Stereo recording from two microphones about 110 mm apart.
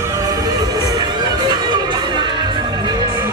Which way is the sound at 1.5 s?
45° right (ahead or behind).